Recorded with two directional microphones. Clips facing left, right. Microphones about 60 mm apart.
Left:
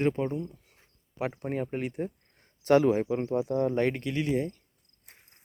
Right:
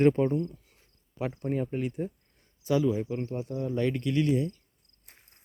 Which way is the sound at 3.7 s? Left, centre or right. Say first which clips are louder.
Right 1 dB; left.